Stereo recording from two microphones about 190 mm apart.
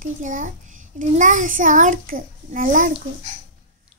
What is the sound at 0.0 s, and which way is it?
A child's voice, 40° right (ahead or behind).